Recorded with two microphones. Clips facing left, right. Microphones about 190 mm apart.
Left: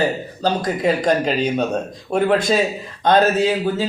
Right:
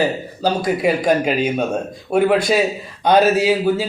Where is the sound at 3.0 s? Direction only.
10° right (ahead or behind).